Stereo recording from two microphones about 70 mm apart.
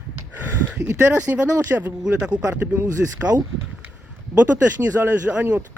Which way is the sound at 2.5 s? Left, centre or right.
Right.